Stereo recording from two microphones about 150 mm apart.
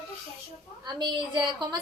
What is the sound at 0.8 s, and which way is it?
Speech, 30° right (ahead or behind).